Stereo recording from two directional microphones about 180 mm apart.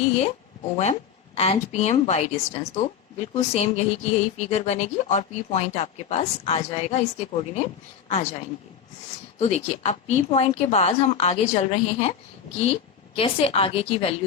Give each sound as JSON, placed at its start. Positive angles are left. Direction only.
{"t": 1.4, "sound": "a woman's voice", "side_deg": 35}
{"t": 9.4, "sound": "a woman's voice", "side_deg": 35}